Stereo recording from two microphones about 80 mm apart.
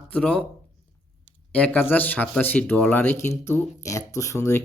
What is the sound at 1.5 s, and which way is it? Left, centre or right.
Speech, centre.